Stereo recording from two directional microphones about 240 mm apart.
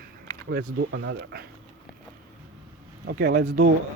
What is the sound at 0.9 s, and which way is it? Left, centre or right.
Speech, right.